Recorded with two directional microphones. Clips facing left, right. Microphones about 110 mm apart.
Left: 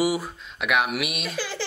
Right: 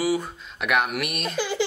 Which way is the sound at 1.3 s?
15° right (ahead or behind).